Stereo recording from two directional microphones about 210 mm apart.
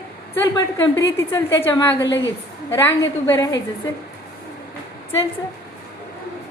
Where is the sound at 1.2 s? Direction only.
15° left (ahead or behind).